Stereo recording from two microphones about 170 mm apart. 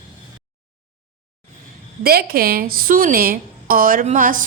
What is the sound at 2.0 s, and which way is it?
A woman's voice, 65° right (ahead or behind).